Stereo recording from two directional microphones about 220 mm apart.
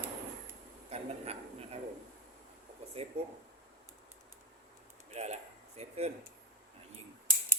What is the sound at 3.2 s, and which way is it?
Speech, 30° right (ahead or behind).